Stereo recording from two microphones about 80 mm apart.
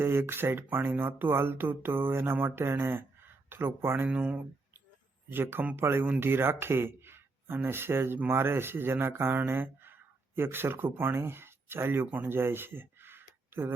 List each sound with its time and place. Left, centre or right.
0.0 s speech: right